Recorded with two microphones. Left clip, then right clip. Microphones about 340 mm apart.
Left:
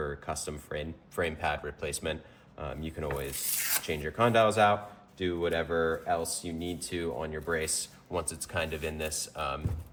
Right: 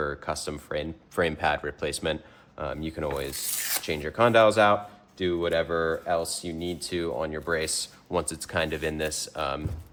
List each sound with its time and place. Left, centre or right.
0.0 s speech: right